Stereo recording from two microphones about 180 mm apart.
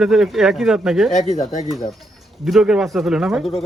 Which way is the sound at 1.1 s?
40° left (ahead or behind).